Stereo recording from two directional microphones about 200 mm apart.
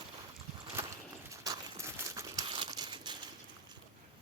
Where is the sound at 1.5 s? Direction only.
15° right (ahead or behind).